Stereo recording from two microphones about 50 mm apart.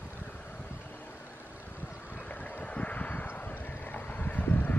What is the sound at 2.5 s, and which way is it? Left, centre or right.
Vehicle, left.